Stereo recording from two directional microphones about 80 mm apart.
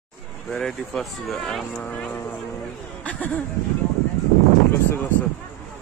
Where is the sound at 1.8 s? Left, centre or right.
Centre.